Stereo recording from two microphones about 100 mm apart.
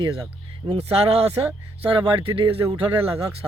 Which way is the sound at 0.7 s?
90° right.